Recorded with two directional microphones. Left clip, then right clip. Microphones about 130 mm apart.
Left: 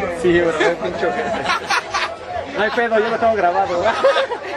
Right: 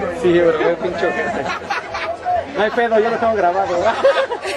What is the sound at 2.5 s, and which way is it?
Speech, 15° right (ahead or behind).